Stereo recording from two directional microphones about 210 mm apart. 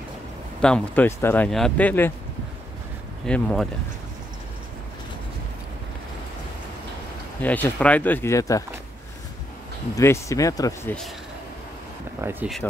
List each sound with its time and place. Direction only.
0.6 s speech: 5° left (ahead or behind)
3.3 s speech: 5° left (ahead or behind)
7.4 s speech: 10° left (ahead or behind)
9.9 s speech: 15° left (ahead or behind)
12.2 s speech: 10° right (ahead or behind)